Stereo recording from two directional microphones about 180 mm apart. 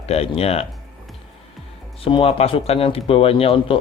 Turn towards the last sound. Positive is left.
turn(degrees=30)  # may be behind; listen again after turning